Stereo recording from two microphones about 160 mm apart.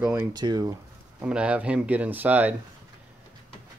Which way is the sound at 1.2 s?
5° right (ahead or behind).